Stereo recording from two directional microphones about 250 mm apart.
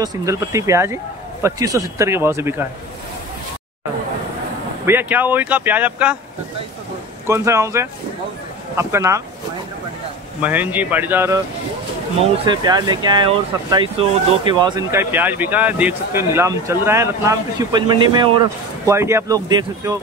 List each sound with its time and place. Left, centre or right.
0.0 s speech: centre
4.8 s speech: centre
7.2 s speech: centre
10.4 s speech: centre